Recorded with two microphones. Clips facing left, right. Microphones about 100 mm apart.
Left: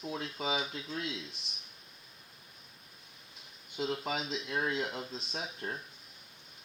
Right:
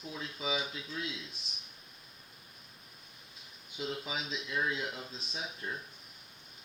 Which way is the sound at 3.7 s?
60° left (ahead or behind).